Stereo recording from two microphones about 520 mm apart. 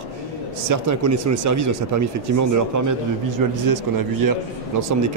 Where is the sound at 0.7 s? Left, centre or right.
Right.